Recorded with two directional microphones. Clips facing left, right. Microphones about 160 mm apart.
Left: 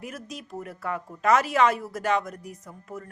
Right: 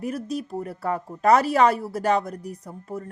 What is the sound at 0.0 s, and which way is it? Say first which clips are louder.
Speech: right 10 dB; 35° right (ahead or behind).